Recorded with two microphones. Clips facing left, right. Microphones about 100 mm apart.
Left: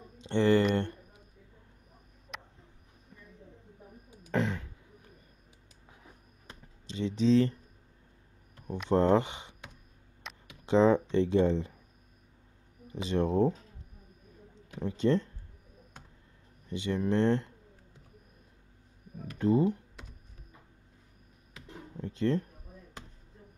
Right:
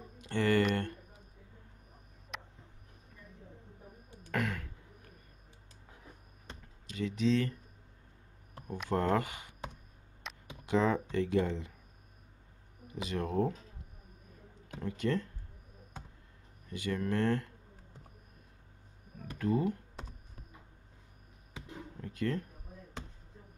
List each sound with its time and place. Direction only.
0.2 s a sound: 25° left (ahead or behind)
2.3 s a sound: centre (ahead or behind)
4.3 s a sound: 25° left (ahead or behind)
6.9 s speech: 30° left (ahead or behind)
8.9 s speech: 25° left (ahead or behind)
10.3 s a sound: centre (ahead or behind)
10.6 s speech: 30° left (ahead or behind)
12.8 s speech: 30° left (ahead or behind)
14.8 s speech: 25° left (ahead or behind)
16.6 s speech: 25° left (ahead or behind)
19.3 s speech: 25° left (ahead or behind)
21.9 s speech: 25° left (ahead or behind)